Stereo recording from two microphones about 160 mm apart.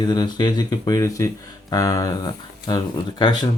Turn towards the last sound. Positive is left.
turn(degrees=30)  # may be behind; listen again after turning